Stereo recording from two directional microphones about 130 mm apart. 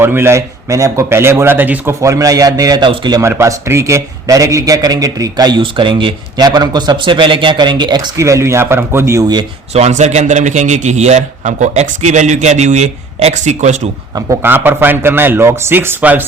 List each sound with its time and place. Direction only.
0.0 s a man's voice: 20° right (ahead or behind); by 3.2 s 35° right (ahead or behind)
3.2 s a man's voice: 20° right (ahead or behind)
9.7 s a man's voice: 60° right (ahead or behind)
14.4 s speech: 15° right (ahead or behind)